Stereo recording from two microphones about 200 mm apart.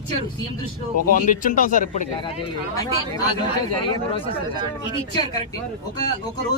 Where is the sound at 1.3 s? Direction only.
40° left (ahead or behind).